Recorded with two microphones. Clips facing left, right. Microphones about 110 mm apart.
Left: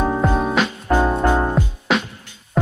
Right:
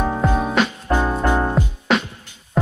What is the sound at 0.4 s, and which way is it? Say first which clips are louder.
Music: even; centre (ahead or behind).